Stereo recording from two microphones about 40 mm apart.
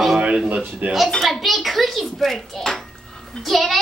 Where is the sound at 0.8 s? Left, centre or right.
Right.